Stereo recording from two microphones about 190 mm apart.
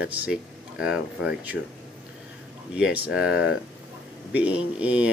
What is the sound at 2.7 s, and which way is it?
Speech, 5° right (ahead or behind).